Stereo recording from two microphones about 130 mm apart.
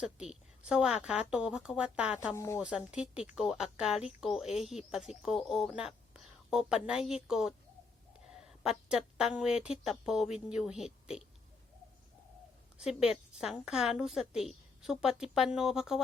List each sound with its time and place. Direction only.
0.0 s a woman's voice: 5° right (ahead or behind)
2.3 s speech: 20° left (ahead or behind)
2.6 s a woman's voice: 5° right (ahead or behind)
8.3 s a sound: 5° right (ahead or behind)
8.9 s speech: 5° right (ahead or behind)
12.7 s speech: 5° right (ahead or behind)